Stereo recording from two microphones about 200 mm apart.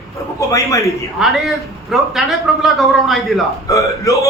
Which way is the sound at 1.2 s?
Centre (ahead or behind).